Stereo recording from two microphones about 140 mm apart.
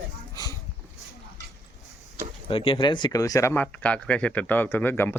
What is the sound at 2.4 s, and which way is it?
Speech, 40° left (ahead or behind).